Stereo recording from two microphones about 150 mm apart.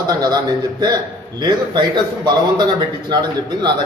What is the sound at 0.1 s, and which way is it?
A man's voice, 25° right (ahead or behind).